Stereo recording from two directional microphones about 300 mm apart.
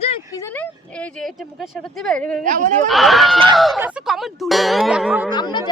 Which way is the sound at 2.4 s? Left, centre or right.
Right.